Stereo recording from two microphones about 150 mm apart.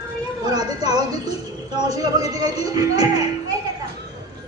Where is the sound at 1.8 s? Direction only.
25° right (ahead or behind).